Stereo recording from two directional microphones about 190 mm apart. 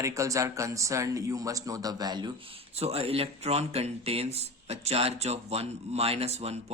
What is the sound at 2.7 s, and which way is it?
Speech, 30° right (ahead or behind).